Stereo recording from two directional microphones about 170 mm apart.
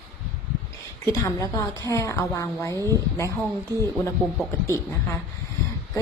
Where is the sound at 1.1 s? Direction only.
20° left (ahead or behind).